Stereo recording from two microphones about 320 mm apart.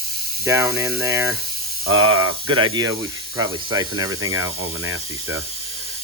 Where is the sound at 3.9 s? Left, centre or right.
Right.